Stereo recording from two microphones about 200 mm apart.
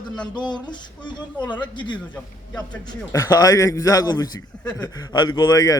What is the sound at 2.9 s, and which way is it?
A man's voice, 15° left (ahead or behind).